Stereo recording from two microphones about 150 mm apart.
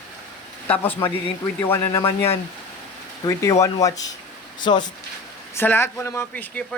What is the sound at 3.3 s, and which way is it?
Speech, 20° left (ahead or behind).